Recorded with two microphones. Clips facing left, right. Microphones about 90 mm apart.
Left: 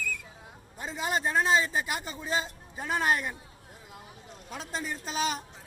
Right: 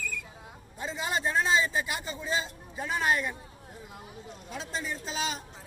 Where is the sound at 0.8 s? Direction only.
45° left (ahead or behind).